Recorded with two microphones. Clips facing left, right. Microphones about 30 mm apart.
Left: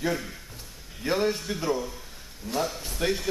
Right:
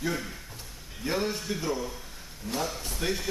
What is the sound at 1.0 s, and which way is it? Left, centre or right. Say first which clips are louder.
A man's voice: left 4 dB; centre.